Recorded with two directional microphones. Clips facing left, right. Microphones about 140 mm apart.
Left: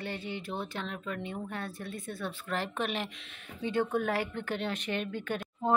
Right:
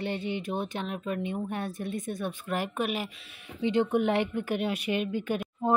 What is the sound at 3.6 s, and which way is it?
Speech, 20° right (ahead or behind).